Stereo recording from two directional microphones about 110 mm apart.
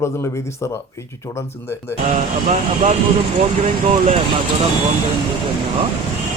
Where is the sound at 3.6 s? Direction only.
90° right.